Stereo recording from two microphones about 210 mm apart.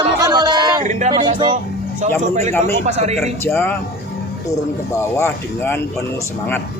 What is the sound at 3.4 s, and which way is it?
Speech, 10° left (ahead or behind).